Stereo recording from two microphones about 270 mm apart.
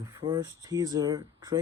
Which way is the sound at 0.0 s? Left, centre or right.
Centre.